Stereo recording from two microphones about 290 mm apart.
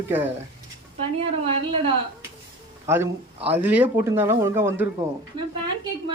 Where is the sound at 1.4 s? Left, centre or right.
Centre.